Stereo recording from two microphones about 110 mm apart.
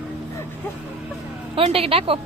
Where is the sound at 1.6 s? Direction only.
60° right (ahead or behind).